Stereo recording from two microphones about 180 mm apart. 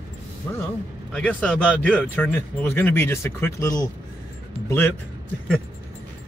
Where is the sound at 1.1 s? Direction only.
5° left (ahead or behind).